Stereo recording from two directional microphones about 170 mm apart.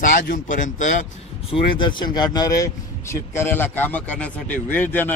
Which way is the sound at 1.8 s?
25° left (ahead or behind).